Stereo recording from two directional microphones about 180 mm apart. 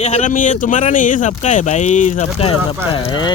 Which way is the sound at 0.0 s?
40° left (ahead or behind).